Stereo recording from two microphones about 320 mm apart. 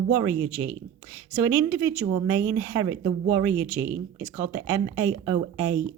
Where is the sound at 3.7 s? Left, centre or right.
Right.